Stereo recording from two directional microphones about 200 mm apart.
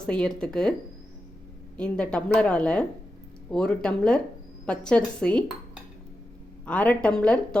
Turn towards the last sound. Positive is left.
turn(degrees=5)  # may be behind; listen again after turning